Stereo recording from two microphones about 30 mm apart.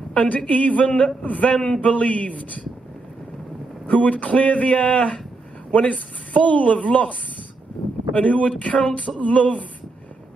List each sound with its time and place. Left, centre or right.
0.1 s speech: left
0.5 s a woman's voice: left
0.8 s speech: left
1.2 s a woman's voice: left
1.5 s a man's voice: left
1.8 s speech: left
3.8 s speech: left
5.7 s a woman's voice: left